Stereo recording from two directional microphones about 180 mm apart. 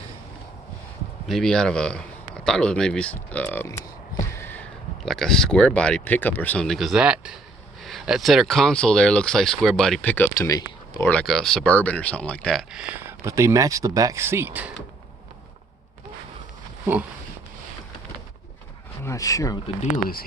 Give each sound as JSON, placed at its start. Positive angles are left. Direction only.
{"t": 1.3, "sound": "speech", "side_deg": 5}
{"t": 16.8, "sound": "speech", "side_deg": -10}
{"t": 19.0, "sound": "speech", "side_deg": 20}